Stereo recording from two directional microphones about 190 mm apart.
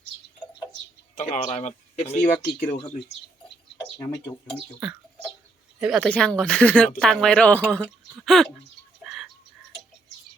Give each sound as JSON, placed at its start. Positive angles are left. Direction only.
{"t": 1.1, "sound": "speech", "side_deg": 40}
{"t": 2.4, "sound": "speech", "side_deg": 50}
{"t": 4.0, "sound": "speech", "side_deg": 20}
{"t": 4.8, "sound": "a sound", "side_deg": -5}
{"t": 5.8, "sound": "speech", "side_deg": 0}
{"t": 9.0, "sound": "a sound", "side_deg": 0}